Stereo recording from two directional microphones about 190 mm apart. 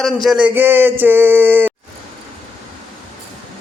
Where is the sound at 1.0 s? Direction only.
10° right (ahead or behind).